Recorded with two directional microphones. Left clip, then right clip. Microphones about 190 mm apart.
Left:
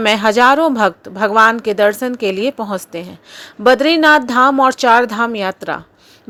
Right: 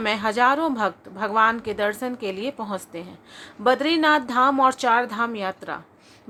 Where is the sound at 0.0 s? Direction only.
40° left (ahead or behind).